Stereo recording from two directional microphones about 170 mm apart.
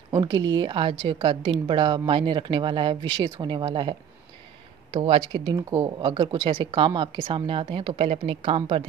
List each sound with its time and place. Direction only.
0.1 s speech: 25° right (ahead or behind)
4.9 s speech: 30° right (ahead or behind)